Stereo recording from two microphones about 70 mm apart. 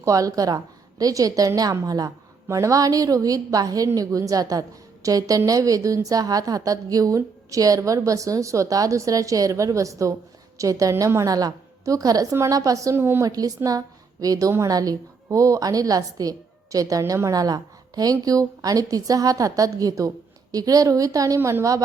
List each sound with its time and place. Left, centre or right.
0.0 s a woman's voice: right
13.0 s a woman's voice: right
13.2 s a woman's voice: right
21.3 s a woman's voice: right